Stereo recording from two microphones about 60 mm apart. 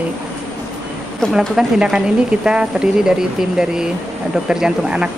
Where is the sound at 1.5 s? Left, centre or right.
Centre.